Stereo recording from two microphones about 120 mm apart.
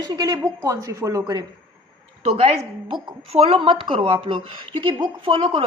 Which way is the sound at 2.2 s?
60° right (ahead or behind).